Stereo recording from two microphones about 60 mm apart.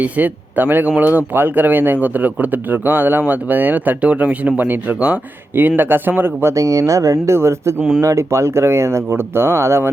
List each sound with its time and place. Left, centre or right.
0.0 s speech: right
4.9 s speech: centre
5.5 s speech: right
6.5 s speech: right
7.3 s speech: right